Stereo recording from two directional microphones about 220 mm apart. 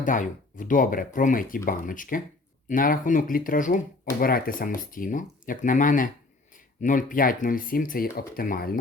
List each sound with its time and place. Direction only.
0.0 s speech: 35° left (ahead or behind)